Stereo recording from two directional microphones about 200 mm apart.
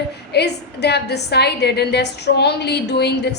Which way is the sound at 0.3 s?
55° left (ahead or behind).